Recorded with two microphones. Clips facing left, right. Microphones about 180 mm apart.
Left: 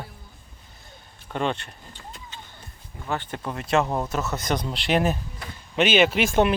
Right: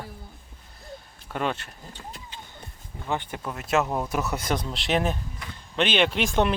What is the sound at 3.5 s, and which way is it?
Speech, 5° right (ahead or behind).